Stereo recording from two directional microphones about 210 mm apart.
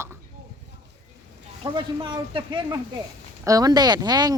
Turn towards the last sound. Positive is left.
turn(degrees=-20)  # may be behind; listen again after turning